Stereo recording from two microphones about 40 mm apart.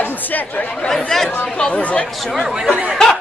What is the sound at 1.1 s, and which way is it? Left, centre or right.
Speech, centre.